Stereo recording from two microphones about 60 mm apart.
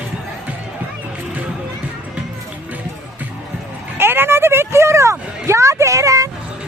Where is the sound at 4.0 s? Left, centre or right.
Right.